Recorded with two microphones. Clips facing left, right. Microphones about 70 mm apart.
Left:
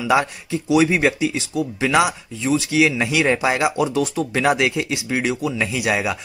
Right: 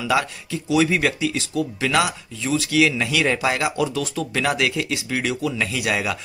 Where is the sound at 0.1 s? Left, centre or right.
Left.